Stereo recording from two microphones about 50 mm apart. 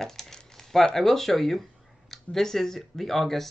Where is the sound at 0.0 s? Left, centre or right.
Centre.